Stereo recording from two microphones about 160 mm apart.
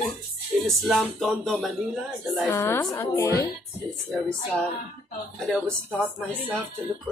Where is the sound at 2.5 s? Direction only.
15° left (ahead or behind).